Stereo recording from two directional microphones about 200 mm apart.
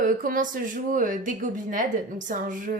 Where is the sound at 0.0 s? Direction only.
45° right (ahead or behind).